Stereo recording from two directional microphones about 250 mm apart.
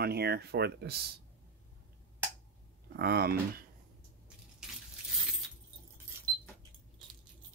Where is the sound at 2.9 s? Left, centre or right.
Right.